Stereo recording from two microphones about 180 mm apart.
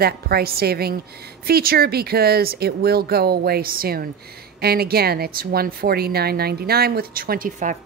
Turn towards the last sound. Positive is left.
turn(degrees=-45)  # may be behind; listen again after turning